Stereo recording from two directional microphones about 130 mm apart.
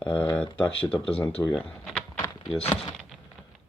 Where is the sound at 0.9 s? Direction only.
45° left (ahead or behind).